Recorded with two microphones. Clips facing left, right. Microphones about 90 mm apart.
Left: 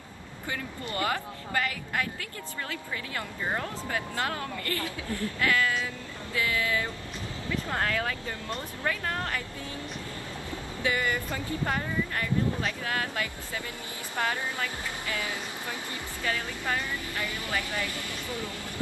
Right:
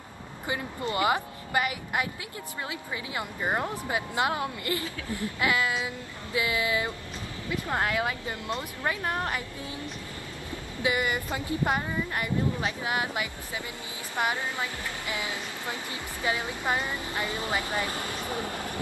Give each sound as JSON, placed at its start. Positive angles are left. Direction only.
{"t": 0.5, "sound": "speech", "side_deg": -20}
{"t": 10.8, "sound": "speech", "side_deg": -20}
{"t": 18.3, "sound": "speech", "side_deg": -50}